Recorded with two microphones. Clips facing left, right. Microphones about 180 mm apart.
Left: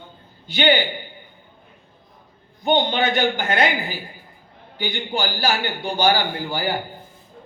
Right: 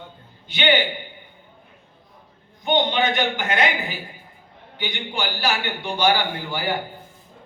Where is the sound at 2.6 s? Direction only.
35° left (ahead or behind).